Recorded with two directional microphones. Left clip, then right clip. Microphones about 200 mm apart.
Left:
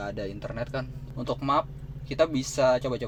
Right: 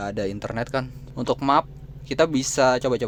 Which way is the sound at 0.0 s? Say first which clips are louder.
Right 6 dB; 30° right (ahead or behind).